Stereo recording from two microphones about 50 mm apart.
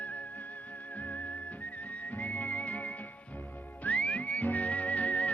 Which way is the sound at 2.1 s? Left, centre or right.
Left.